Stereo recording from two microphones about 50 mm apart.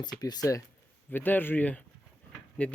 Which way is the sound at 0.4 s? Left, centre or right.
Left.